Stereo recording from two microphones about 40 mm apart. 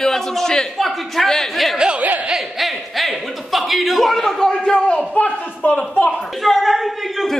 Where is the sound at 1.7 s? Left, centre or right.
Centre.